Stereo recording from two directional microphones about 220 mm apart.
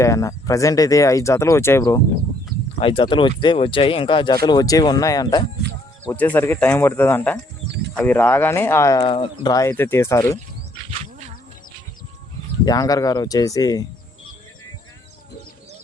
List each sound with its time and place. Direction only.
0.0 s speech: 15° left (ahead or behind)
2.7 s speech: 25° left (ahead or behind)
12.6 s speech: 15° left (ahead or behind)